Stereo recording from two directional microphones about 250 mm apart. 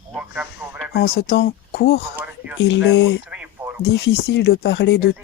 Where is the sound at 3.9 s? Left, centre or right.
Left.